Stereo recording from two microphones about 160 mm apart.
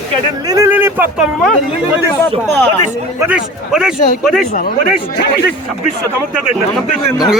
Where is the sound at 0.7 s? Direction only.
10° right (ahead or behind).